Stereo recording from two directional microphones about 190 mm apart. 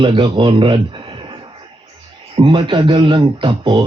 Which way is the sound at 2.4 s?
25° right (ahead or behind).